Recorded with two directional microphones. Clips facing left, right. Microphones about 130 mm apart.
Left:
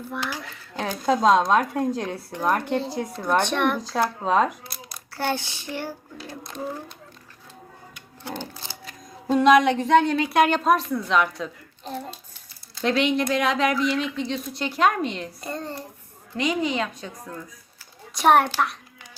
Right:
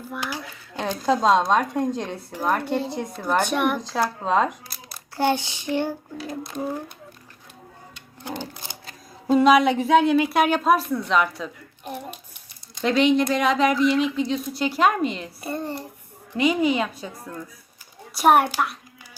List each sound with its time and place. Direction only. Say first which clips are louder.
0.1 s a woman's voice: right 1 dB; 15° right (ahead or behind)
0.5 s a woman's voice: right 1 dB; centre (ahead or behind)
5.1 s a woman's voice: right 5 dB; 15° right (ahead or behind)
7.9 s sewing machine: right 1 dB; 15° right (ahead or behind)
9.2 s speech: even; 5° right (ahead or behind)
11.9 s a woman's voice: left 1 dB; 15° right (ahead or behind)
12.8 s a woman's voice: right 3 dB; centre (ahead or behind)